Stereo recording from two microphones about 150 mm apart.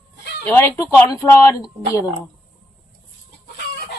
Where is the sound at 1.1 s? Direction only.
20° left (ahead or behind).